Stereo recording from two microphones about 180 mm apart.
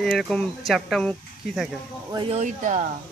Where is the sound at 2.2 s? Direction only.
40° right (ahead or behind).